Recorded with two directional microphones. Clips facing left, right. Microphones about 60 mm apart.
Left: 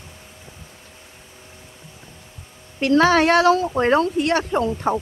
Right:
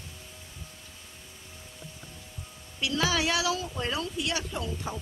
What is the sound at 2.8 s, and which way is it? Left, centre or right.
Speech, left.